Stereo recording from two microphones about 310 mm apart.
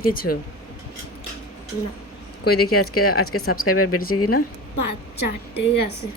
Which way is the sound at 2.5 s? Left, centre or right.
Left.